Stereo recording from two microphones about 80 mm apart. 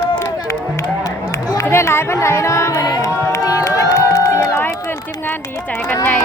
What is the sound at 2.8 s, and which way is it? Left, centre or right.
Crowd, left.